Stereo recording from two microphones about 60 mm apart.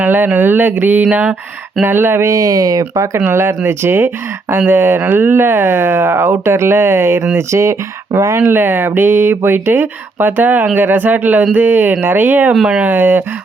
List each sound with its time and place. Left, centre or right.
0.0 s speech: right
2.2 s speech: right
3.2 s speech: right
8.4 s speech: right